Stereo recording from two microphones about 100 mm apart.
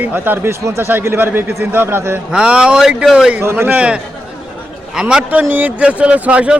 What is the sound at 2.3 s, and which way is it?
A man's voice, 10° right (ahead or behind).